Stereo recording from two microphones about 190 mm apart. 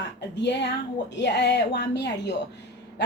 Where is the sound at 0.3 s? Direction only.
65° left (ahead or behind).